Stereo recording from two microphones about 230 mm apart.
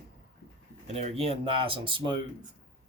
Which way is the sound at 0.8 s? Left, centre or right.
Right.